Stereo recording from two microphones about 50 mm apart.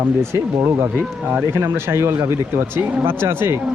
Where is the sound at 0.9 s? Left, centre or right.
Right.